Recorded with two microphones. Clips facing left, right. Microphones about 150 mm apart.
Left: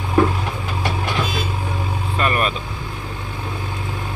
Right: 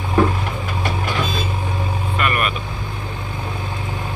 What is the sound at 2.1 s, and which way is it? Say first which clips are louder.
Vehicle: left 1 dB; 30° left (ahead or behind).